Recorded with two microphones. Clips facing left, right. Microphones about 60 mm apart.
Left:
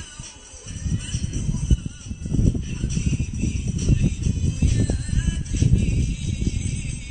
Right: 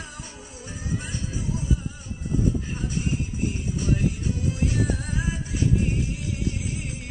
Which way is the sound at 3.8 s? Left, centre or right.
Right.